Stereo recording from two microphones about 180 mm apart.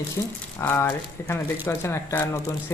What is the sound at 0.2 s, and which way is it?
Speech, 15° left (ahead or behind).